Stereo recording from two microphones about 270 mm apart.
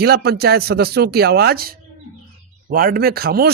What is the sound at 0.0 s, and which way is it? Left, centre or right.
Speech, right.